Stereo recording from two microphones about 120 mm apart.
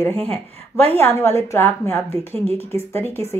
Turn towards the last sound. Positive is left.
turn(degrees=20)  # may be behind; listen again after turning